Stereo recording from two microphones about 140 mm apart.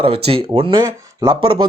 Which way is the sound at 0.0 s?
40° right (ahead or behind).